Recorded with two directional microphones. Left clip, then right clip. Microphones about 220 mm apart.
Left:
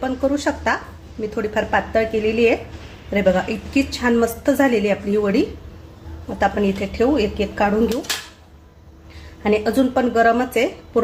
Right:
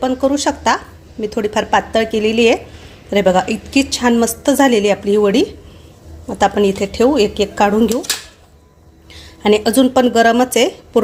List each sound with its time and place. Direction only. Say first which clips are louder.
0.0 s a woman's voice: right 5 dB; 25° right (ahead or behind)
9.4 s speech: right 5 dB; 30° right (ahead or behind)